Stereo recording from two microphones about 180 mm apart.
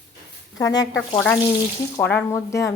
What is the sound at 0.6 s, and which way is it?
Speech, 20° left (ahead or behind).